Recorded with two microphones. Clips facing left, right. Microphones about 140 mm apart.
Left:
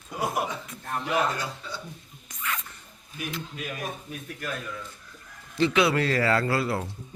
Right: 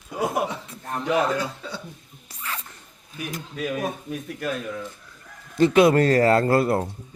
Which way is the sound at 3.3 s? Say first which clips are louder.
Right 1 dB; 45° right (ahead or behind).